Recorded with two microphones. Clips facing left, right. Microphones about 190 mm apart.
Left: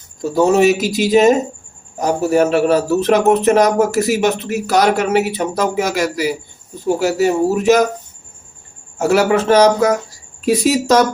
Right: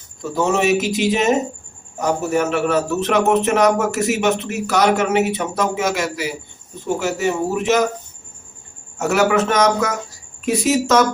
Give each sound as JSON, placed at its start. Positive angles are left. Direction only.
{"t": 0.2, "sound": "a man's voice", "side_deg": 35}
{"t": 9.0, "sound": "a man's voice", "side_deg": 30}